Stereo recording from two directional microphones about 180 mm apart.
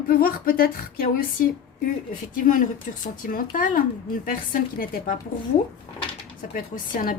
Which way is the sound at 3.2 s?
50° left (ahead or behind).